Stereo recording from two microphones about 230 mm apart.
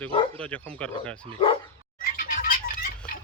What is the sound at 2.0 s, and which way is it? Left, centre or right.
Bird, left.